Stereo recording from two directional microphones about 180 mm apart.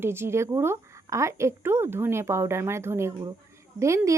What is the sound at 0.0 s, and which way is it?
A woman's voice, 15° right (ahead or behind).